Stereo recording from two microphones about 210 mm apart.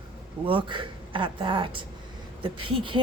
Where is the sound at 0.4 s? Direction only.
25° right (ahead or behind).